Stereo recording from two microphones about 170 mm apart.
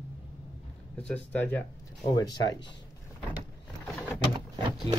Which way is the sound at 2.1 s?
20° left (ahead or behind).